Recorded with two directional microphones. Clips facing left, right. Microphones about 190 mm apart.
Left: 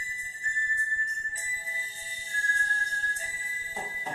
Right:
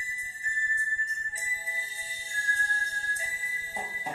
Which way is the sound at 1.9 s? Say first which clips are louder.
Even; 10° right (ahead or behind).